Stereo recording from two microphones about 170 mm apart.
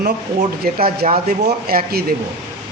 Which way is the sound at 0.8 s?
35° right (ahead or behind).